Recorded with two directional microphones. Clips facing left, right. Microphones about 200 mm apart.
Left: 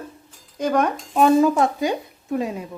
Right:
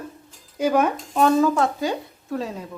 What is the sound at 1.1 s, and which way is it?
Speech, 15° left (ahead or behind).